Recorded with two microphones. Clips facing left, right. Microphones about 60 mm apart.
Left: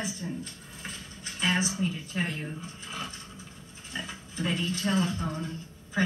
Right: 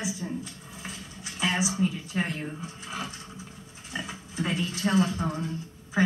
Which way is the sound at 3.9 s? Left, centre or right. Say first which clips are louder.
Right 3 dB; centre.